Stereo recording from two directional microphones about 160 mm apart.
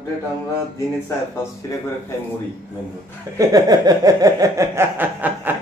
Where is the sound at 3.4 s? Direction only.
25° right (ahead or behind).